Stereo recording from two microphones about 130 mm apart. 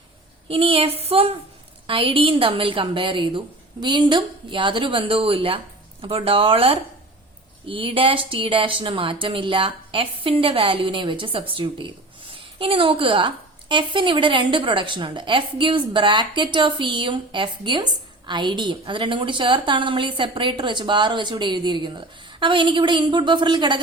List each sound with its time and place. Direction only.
0.4 s a woman's voice: 45° right (ahead or behind)